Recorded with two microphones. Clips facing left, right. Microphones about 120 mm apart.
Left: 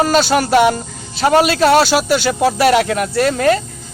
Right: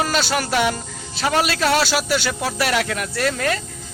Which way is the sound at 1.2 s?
35° left (ahead or behind).